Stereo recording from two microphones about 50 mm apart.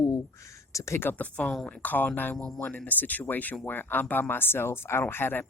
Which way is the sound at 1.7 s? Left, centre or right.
Left.